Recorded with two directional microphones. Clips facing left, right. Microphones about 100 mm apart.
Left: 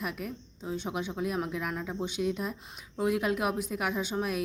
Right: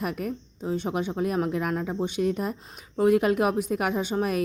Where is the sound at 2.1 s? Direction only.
50° right (ahead or behind).